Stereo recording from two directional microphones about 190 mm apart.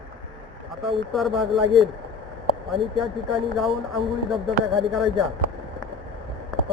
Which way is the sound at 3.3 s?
Centre (ahead or behind).